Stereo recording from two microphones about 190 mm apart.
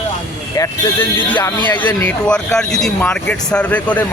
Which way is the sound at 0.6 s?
10° left (ahead or behind).